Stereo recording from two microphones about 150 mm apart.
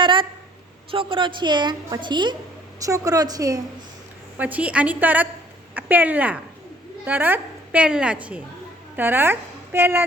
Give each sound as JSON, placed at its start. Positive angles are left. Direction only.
{"t": 0.0, "sound": "a sound", "side_deg": -35}
{"t": 0.9, "sound": "a woman's voice", "side_deg": -35}
{"t": 4.4, "sound": "a woman's voice", "side_deg": -10}